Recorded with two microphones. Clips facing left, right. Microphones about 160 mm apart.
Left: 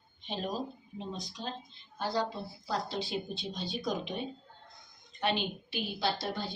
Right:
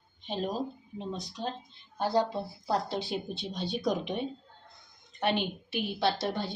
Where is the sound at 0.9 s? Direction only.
65° right (ahead or behind).